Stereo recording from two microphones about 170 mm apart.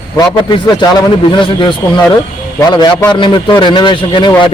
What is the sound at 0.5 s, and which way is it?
A man's voice, 25° left (ahead or behind).